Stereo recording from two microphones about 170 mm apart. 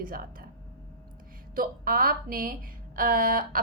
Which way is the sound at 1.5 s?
55° right (ahead or behind).